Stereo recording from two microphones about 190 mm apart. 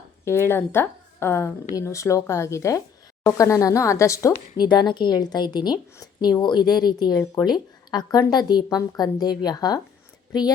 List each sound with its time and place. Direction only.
0.3 s a woman's voice: 15° left (ahead or behind)